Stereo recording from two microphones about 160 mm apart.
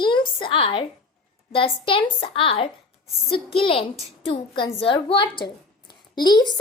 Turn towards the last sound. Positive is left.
turn(degrees=25)  # may be behind; listen again after turning